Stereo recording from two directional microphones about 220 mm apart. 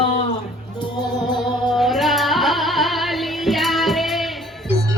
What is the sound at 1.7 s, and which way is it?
Music, centre (ahead or behind).